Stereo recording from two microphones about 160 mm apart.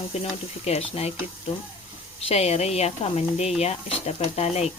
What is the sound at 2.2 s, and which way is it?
Speech, 40° left (ahead or behind).